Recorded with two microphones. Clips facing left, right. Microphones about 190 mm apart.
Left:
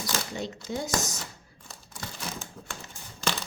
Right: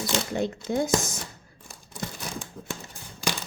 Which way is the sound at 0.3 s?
55° right (ahead or behind).